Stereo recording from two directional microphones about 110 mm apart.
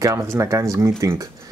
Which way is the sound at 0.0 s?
30° right (ahead or behind).